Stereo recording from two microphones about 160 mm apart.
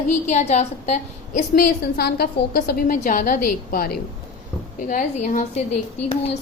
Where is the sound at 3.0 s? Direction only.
55° left (ahead or behind).